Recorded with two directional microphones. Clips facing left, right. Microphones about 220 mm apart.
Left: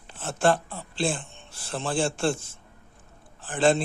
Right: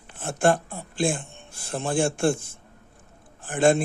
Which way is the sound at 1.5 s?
50° right (ahead or behind).